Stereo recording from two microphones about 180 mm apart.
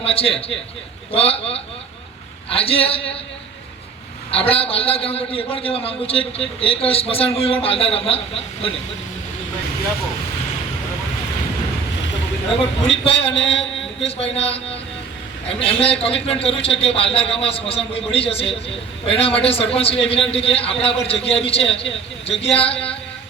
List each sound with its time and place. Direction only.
0.0 s a man's voice: 30° left (ahead or behind)
4.3 s a man's voice: 35° left (ahead or behind)
12.9 s a man's voice: 30° left (ahead or behind)